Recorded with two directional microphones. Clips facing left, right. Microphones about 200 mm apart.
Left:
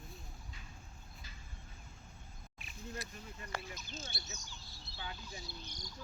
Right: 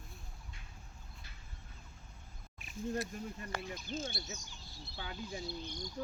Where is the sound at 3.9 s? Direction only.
50° right (ahead or behind).